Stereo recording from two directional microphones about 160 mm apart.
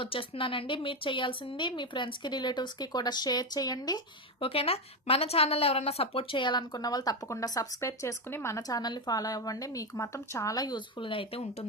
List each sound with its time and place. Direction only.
0.0 s a woman's voice: 35° left (ahead or behind)